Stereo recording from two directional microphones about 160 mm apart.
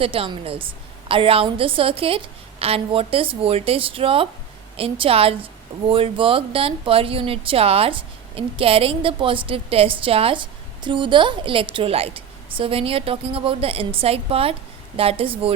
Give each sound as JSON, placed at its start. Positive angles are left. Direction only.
{"t": 0.0, "sound": "a woman's voice", "side_deg": -35}